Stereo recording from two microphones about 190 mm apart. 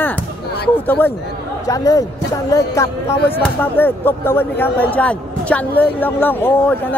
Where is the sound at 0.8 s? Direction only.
10° left (ahead or behind).